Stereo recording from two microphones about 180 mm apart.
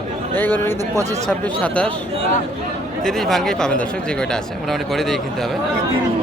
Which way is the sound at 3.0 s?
Centre (ahead or behind).